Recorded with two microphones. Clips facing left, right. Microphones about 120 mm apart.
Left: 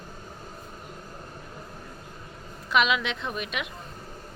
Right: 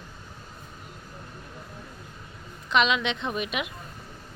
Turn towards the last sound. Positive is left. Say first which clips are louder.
# right 3 dB
turn(degrees=-5)  # may be behind; listen again after turning